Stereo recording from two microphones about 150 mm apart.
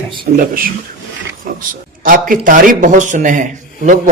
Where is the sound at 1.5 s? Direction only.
75° right (ahead or behind).